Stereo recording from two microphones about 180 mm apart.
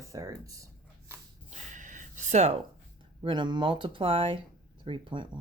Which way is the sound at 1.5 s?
45° right (ahead or behind).